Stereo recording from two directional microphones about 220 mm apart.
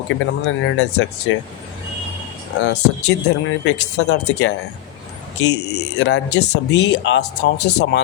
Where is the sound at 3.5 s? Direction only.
55° left (ahead or behind).